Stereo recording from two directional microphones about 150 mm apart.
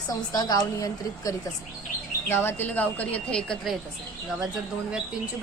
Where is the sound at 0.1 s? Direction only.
25° left (ahead or behind); by 3.8 s 5° left (ahead or behind).